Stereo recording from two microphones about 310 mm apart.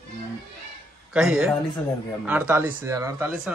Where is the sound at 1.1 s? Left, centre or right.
Centre.